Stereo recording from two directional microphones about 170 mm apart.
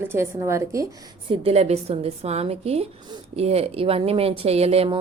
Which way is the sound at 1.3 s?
35° right (ahead or behind).